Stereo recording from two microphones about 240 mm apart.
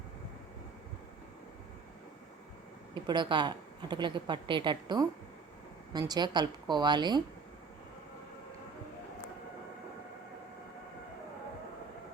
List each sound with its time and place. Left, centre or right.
2.9 s a woman's voice: centre